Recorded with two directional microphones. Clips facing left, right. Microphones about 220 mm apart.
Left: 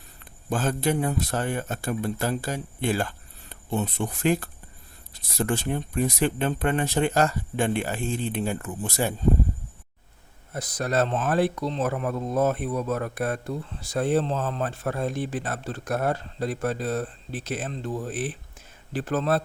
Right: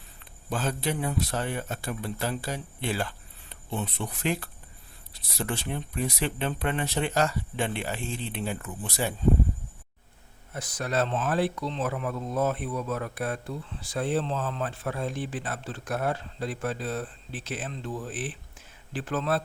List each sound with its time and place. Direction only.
0.5 s speech: 50° left (ahead or behind)
10.5 s speech: 40° left (ahead or behind)